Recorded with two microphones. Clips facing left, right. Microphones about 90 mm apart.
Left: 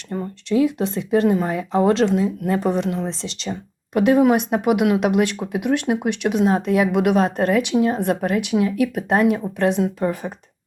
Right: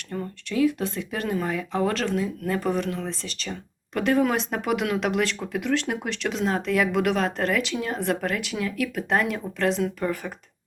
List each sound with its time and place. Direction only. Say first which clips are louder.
0.1 s speech: left 8 dB; 25° left (ahead or behind)